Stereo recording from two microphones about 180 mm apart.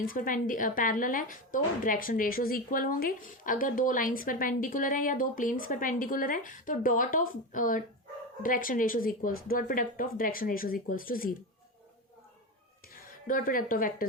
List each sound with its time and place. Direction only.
0.0 s speech: 50° left (ahead or behind)
12.9 s a woman's voice: 55° left (ahead or behind)